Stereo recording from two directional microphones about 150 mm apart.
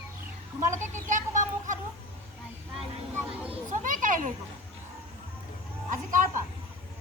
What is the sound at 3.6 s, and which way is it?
Children playing, 60° right (ahead or behind).